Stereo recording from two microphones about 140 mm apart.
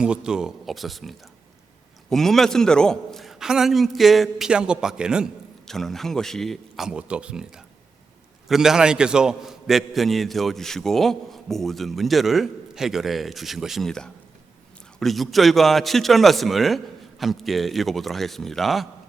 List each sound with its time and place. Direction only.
0.0 s a man's voice: 5° right (ahead or behind)